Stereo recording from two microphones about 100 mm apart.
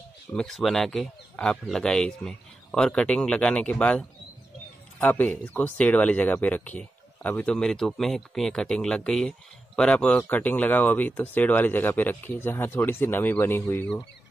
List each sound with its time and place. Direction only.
0.3 s speech: 5° left (ahead or behind); by 13.8 s 25° left (ahead or behind)